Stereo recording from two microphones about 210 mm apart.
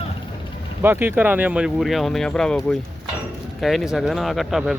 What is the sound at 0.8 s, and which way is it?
Speech, 10° right (ahead or behind).